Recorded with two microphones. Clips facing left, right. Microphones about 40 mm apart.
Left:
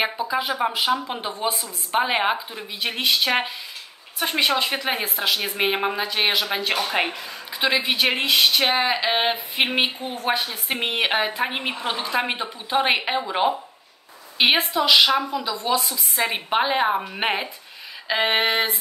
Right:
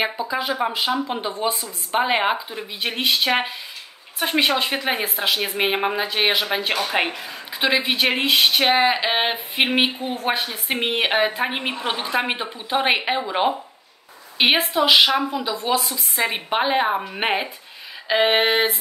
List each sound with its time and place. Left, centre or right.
0.0 s a woman's voice: centre
14.7 s a woman's voice: centre